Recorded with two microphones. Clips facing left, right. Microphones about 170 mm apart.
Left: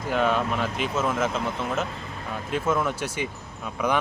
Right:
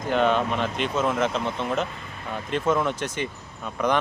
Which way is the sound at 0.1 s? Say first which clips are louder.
Right 2 dB; 5° left (ahead or behind).